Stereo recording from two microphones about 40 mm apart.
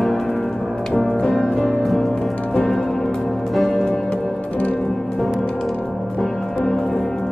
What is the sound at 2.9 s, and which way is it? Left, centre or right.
Music, centre.